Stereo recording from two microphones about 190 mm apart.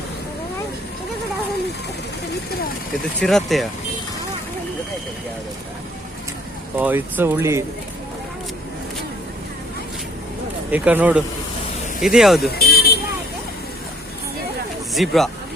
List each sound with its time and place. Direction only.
3.2 s speech: centre (ahead or behind)
6.7 s speech: 10° right (ahead or behind)
10.7 s speech: 5° right (ahead or behind)
12.5 s buzzer: 55° left (ahead or behind)
14.9 s speech: centre (ahead or behind)